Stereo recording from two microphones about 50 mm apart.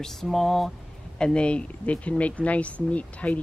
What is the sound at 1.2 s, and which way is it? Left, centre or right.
Speech, centre.